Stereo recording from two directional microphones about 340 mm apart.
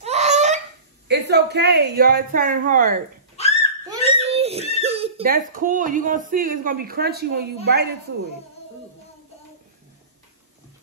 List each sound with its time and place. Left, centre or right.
0.0 s laughter: centre
1.0 s speech: right
3.3 s belly laugh: centre
3.8 s giggle: centre
4.7 s speech: centre